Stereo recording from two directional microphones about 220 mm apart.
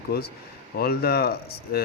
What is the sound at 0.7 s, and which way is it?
Speech, 45° left (ahead or behind).